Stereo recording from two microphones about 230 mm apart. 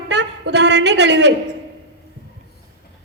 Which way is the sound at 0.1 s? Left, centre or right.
Right.